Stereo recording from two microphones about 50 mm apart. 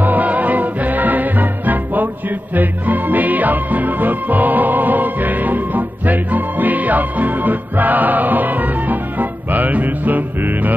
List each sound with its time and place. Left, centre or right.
0.0 s music: right